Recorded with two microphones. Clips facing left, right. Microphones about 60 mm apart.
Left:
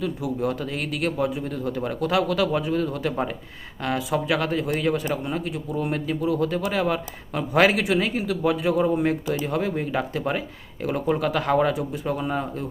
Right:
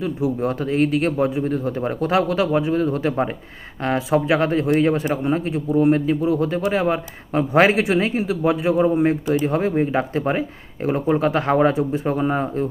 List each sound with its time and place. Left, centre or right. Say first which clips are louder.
0.0 s speech: right 4 dB; right